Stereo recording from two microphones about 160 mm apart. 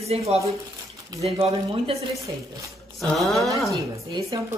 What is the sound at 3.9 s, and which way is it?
Speech, 20° right (ahead or behind).